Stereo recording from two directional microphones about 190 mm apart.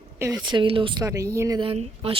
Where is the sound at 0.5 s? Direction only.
25° right (ahead or behind).